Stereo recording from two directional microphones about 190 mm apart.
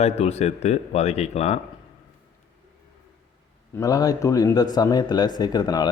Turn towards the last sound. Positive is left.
turn(degrees=20)  # may be behind; listen again after turning